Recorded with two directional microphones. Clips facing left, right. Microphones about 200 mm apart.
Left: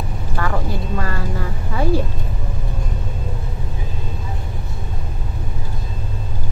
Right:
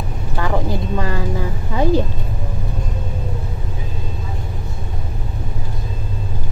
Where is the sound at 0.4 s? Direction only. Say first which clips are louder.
Right 3 dB; 15° right (ahead or behind).